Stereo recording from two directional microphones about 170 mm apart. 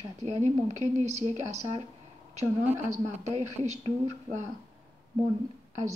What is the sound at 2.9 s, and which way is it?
A woman's voice, 40° right (ahead or behind).